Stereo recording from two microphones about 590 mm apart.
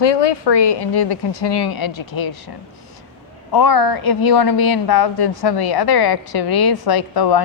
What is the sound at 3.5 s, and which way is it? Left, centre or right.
A woman's voice, left.